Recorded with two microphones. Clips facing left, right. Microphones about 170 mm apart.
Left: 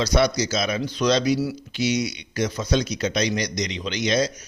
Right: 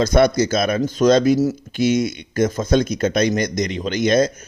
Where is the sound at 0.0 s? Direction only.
50° right (ahead or behind).